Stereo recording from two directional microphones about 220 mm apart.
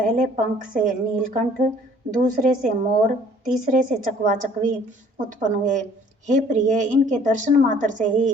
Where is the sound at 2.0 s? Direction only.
35° right (ahead or behind).